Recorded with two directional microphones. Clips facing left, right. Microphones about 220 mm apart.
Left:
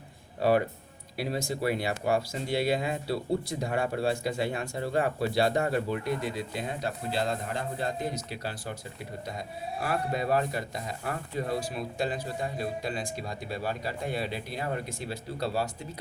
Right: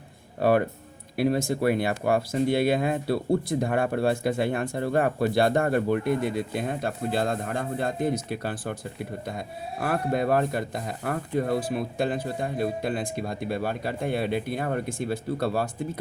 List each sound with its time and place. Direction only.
0.4 s speech: 55° right (ahead or behind)
9.8 s speech: 55° right (ahead or behind)